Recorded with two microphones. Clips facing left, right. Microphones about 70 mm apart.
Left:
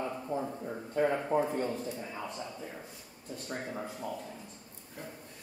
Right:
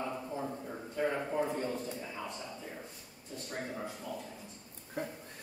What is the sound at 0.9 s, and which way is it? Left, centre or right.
Speech, left.